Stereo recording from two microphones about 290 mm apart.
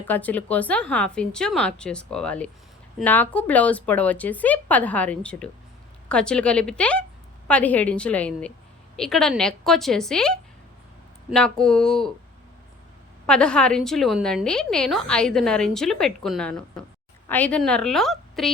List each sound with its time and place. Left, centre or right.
0.0 s a woman's voice: centre
13.2 s a woman's voice: centre